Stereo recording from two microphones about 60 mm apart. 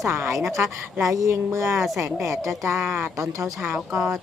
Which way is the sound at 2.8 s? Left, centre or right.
Right.